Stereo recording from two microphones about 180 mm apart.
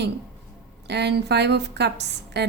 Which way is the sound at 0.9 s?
70° right (ahead or behind).